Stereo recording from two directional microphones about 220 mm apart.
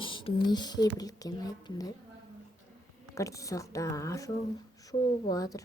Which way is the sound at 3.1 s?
15° left (ahead or behind).